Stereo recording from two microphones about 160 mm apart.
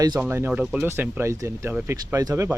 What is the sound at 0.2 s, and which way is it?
Speech, 15° right (ahead or behind).